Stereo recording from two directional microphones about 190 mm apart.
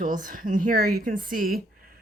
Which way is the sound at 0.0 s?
45° right (ahead or behind).